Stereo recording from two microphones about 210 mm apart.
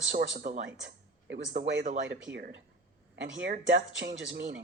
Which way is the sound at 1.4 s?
55° right (ahead or behind).